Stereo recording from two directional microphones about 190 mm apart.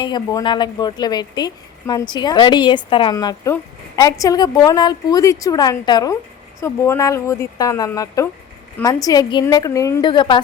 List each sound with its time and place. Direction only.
0.0 s speech: 20° left (ahead or behind)